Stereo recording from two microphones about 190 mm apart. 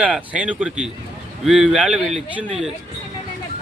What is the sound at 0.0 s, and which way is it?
Speech, 5° right (ahead or behind).